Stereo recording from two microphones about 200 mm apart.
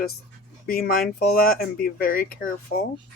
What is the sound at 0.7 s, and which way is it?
Speech, 50° left (ahead or behind).